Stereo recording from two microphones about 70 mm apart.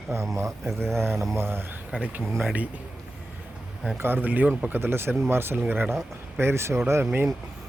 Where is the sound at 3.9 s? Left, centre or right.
Right.